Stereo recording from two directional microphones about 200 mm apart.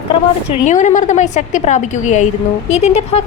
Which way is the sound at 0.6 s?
35° left (ahead or behind).